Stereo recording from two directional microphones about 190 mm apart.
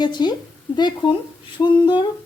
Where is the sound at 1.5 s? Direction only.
25° left (ahead or behind).